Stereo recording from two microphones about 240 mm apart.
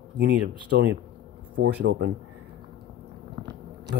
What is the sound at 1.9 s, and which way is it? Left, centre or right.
Speech, right.